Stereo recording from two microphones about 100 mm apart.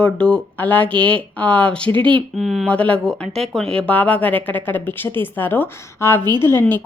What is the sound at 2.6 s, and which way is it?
A woman's voice, 10° left (ahead or behind).